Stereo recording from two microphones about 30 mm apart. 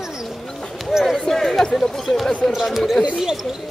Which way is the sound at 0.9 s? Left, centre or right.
Centre.